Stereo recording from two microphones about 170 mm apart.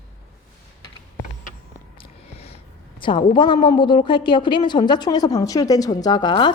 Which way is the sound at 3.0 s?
30° left (ahead or behind).